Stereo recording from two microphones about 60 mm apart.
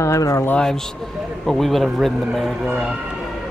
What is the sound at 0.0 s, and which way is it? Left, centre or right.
Speech, left.